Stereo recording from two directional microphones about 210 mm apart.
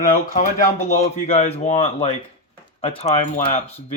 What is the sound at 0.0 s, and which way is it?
Speech, 40° left (ahead or behind).